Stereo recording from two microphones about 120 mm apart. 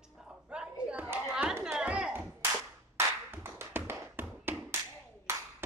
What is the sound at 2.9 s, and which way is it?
Tap, 20° right (ahead or behind).